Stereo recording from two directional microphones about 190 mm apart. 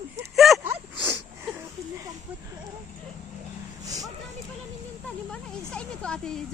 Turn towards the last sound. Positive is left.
turn(degrees=5)  # may be behind; listen again after turning